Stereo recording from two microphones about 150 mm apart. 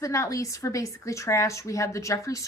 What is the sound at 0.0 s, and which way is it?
A woman's voice, 20° left (ahead or behind).